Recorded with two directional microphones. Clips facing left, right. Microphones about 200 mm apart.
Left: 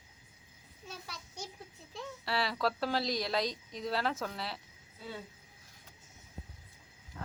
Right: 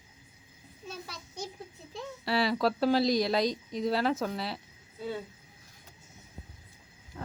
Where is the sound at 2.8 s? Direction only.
5° right (ahead or behind).